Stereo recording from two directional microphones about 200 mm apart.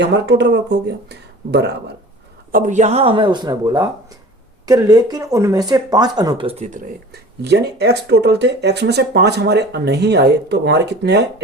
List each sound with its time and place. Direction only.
0.0 s speech: 60° right (ahead or behind)
2.5 s speech: 40° right (ahead or behind)
7.1 s speech: 55° right (ahead or behind)